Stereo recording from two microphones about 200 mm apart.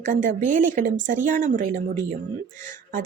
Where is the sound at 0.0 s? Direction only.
40° right (ahead or behind).